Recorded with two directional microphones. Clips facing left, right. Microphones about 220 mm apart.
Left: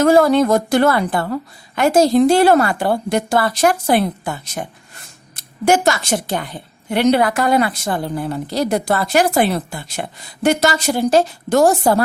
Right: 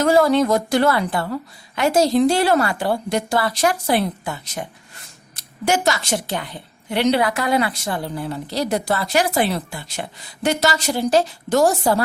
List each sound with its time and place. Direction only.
0.0 s a woman's voice: 50° left (ahead or behind)